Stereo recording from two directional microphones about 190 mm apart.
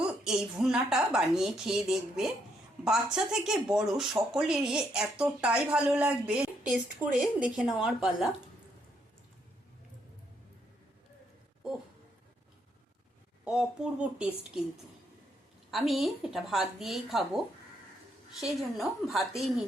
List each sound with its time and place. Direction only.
0.3 s speech: centre (ahead or behind)
13.4 s speech: 5° right (ahead or behind)
15.7 s speech: centre (ahead or behind)